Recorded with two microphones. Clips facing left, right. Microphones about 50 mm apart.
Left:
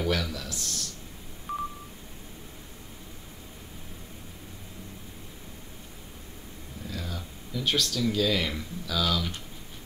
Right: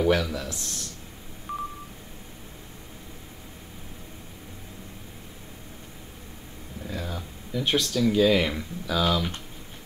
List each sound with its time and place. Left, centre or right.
0.0 s speech: right
1.5 s telephone dialing: centre
6.9 s speech: right